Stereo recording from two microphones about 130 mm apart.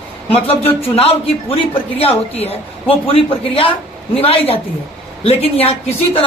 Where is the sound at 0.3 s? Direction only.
50° left (ahead or behind).